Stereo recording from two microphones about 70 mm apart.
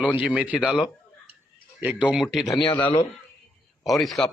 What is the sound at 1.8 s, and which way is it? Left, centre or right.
Speech, centre.